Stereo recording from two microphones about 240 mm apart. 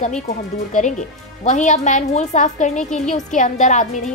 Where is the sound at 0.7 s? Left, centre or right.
Left.